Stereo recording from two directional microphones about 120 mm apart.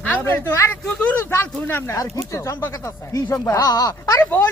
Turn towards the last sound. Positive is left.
turn(degrees=30)  # may be behind; listen again after turning